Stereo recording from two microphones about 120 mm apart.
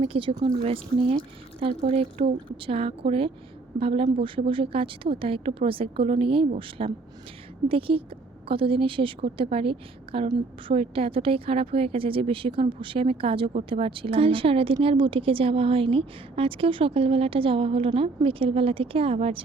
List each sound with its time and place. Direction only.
0.1 s a woman's voice: 45° right (ahead or behind)
10.2 s a woman's voice: 40° right (ahead or behind)
10.8 s a woman's voice: 50° right (ahead or behind)